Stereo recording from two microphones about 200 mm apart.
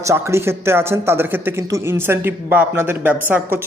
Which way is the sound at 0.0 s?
15° right (ahead or behind).